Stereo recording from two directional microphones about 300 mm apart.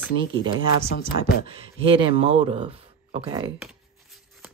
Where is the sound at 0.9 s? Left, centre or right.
Left.